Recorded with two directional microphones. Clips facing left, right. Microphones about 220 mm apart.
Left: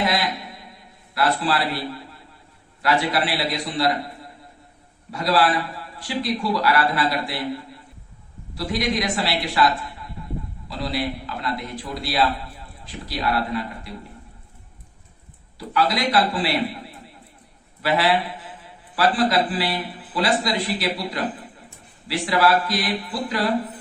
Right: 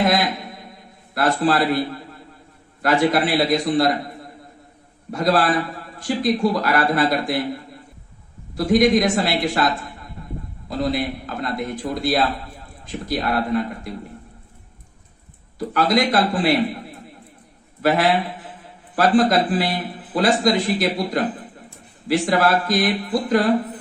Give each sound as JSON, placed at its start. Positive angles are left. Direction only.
{"t": 0.0, "sound": "a man's voice", "side_deg": -45}
{"t": 5.1, "sound": "a man's voice", "side_deg": -50}
{"t": 8.5, "sound": "a man's voice", "side_deg": -50}
{"t": 15.5, "sound": "a man's voice", "side_deg": -50}
{"t": 17.8, "sound": "a man's voice", "side_deg": -50}